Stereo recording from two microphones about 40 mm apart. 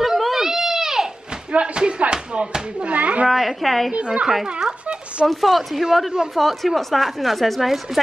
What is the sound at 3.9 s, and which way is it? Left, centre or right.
Speech, right.